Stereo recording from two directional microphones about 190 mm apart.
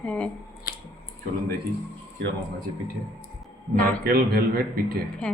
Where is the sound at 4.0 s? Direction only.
55° right (ahead or behind).